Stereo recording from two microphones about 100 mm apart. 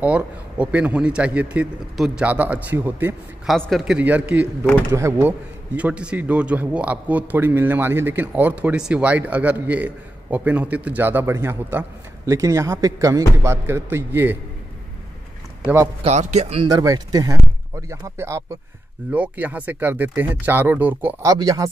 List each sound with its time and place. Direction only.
0.0 s a man's voice: 15° right (ahead or behind)
3.4 s a man's voice: 5° left (ahead or behind)
4.0 s a man's voice: 15° right (ahead or behind)
5.8 s a man's voice: 10° right (ahead or behind)
16.0 s speech: 90° right
16.6 s speech: 40° right (ahead or behind)
19.1 s a man's voice: 15° right (ahead or behind)
21.2 s speech: 35° right (ahead or behind)